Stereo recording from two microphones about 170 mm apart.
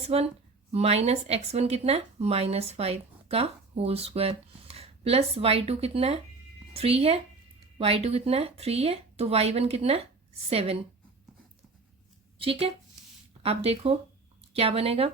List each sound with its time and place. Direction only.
0.1 s speech: 35° right (ahead or behind)
12.4 s speech: 35° right (ahead or behind)